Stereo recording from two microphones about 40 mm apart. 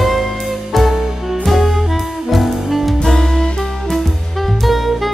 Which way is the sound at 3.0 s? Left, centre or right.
Centre.